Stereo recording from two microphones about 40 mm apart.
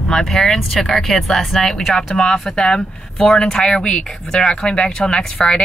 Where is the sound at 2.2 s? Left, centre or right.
Centre.